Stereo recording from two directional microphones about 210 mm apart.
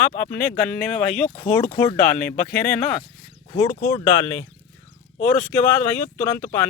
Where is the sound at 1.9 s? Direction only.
5° left (ahead or behind).